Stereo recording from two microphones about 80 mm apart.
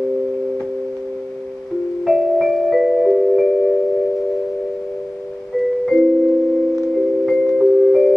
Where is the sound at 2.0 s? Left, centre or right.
Centre.